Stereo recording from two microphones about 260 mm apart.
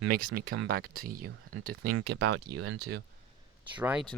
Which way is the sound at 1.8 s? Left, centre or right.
Right.